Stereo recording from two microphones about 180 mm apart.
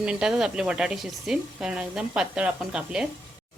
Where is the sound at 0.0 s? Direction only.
5° right (ahead or behind).